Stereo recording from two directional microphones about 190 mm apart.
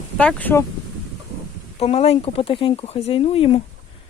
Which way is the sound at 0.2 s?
5° left (ahead or behind).